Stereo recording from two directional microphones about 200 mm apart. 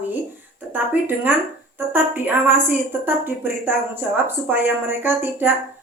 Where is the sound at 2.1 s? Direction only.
10° right (ahead or behind).